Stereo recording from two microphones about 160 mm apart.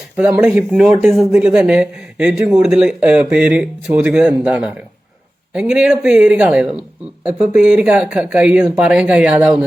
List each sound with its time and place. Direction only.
0.2 s speech: 10° right (ahead or behind)